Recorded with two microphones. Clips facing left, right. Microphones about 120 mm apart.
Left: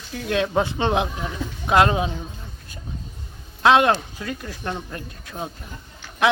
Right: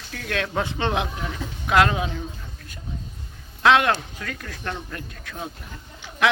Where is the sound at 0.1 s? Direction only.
20° left (ahead or behind).